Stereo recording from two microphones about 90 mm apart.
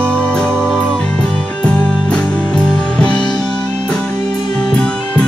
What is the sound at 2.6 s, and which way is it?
Music, 10° left (ahead or behind).